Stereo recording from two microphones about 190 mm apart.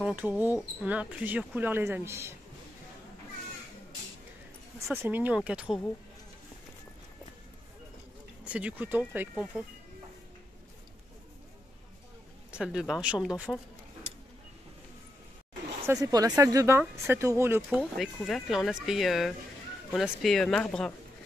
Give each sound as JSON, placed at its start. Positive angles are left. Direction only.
{"t": 0.0, "sound": "speech", "side_deg": -10}
{"t": 4.9, "sound": "speech", "side_deg": -10}
{"t": 8.5, "sound": "speech", "side_deg": -5}
{"t": 12.4, "sound": "speech", "side_deg": -5}
{"t": 15.9, "sound": "speech", "side_deg": -20}
{"t": 17.6, "sound": "speech", "side_deg": -5}